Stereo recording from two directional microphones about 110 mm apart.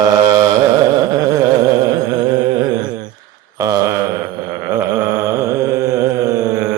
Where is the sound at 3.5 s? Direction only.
30° right (ahead or behind).